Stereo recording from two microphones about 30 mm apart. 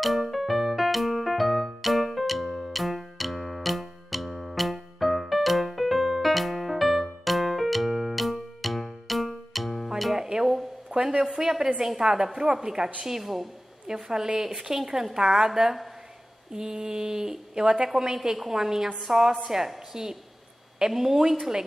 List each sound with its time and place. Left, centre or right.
0.0 s music: centre
10.1 s music: centre
10.4 s a sound: centre
10.9 s mantra: centre
13.0 s a woman's voice: centre
14.0 s mantra: right
15.1 s a woman's voice: centre
16.5 s mantra: centre
18.5 s a woman's voice: centre